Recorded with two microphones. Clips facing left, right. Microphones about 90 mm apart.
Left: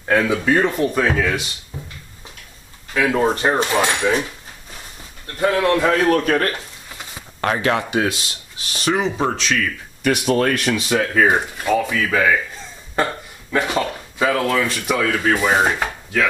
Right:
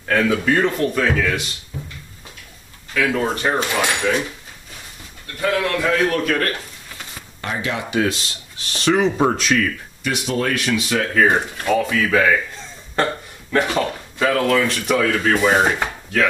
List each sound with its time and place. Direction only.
0.1 s speech: 20° left (ahead or behind)
2.9 s speech: 25° left (ahead or behind)
5.4 s a man's voice: 35° left (ahead or behind)
7.4 s speech: 55° left (ahead or behind)
8.7 s chopping: 5° left (ahead or behind)
9.2 s speech: 5° right (ahead or behind)
10.0 s speech: 50° left (ahead or behind)
10.7 s speech: 10° left (ahead or behind)
12.0 s chopping: centre (ahead or behind)
12.9 s speech: 10° left (ahead or behind)
15.0 s chopping: 5° left (ahead or behind)